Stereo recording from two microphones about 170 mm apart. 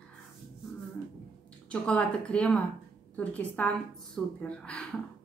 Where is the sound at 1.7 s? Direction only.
5° left (ahead or behind).